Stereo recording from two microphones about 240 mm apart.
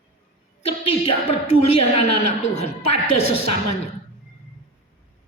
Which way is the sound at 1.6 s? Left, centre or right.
Left.